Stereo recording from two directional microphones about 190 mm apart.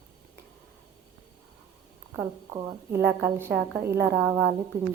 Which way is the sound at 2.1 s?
15° right (ahead or behind).